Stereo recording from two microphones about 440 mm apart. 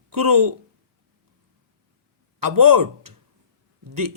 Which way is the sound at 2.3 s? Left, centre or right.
Right.